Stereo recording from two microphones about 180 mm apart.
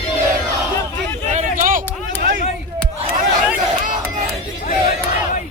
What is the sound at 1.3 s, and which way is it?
Vehicle, 45° right (ahead or behind).